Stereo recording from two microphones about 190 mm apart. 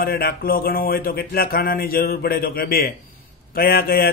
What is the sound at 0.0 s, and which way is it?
Speech, 50° left (ahead or behind).